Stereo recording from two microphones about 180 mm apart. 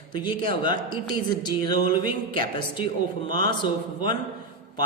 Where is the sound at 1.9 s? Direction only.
50° right (ahead or behind).